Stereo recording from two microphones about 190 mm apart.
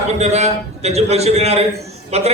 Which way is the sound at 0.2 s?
35° right (ahead or behind).